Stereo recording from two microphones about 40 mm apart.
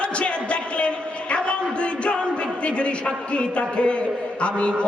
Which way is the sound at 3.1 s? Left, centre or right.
Left.